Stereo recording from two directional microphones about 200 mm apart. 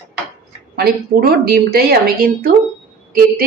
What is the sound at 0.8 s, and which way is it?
A woman's voice, 50° right (ahead or behind).